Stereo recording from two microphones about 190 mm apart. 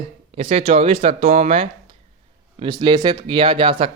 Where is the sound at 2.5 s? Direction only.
25° right (ahead or behind).